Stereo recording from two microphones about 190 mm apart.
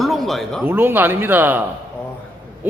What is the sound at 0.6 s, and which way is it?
Speech, 10° right (ahead or behind).